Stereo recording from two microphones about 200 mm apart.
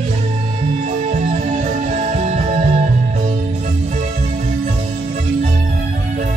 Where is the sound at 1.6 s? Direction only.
35° right (ahead or behind).